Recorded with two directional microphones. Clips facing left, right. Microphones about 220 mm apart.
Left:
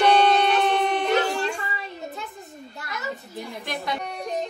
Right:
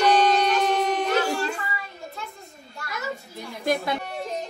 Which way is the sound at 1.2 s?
5° right (ahead or behind).